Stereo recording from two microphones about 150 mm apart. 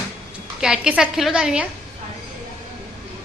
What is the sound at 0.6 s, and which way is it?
A woman's voice, 5° right (ahead or behind).